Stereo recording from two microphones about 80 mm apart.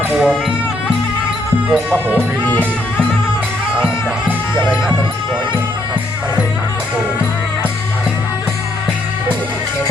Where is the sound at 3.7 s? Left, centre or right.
Centre.